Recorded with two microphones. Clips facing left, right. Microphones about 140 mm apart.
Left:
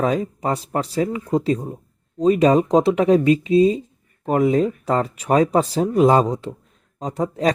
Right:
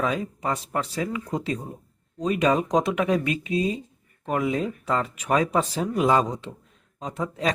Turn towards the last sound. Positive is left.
turn(degrees=40)  # may be behind; listen again after turning